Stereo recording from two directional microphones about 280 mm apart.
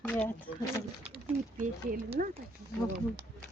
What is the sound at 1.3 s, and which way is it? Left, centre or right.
Speech, centre.